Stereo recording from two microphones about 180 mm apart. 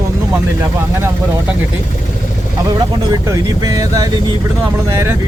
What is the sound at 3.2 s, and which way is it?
Speech, 20° right (ahead or behind).